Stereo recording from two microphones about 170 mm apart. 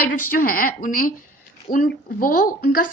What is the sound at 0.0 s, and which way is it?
A woman's voice, 60° left (ahead or behind).